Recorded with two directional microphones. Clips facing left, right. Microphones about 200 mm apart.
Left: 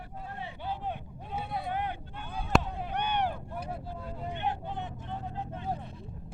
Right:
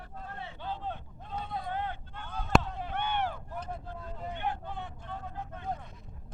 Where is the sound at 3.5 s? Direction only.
10° left (ahead or behind).